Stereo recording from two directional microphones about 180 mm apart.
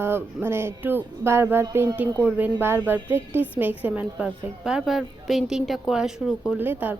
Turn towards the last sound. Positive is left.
turn(degrees=-10)  # may be behind; listen again after turning